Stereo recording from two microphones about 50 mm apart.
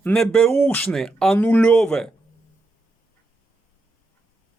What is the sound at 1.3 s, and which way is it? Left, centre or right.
Speech, left.